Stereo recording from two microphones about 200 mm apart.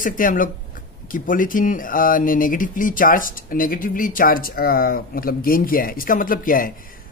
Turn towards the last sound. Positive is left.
turn(degrees=45)  # may be behind; listen again after turning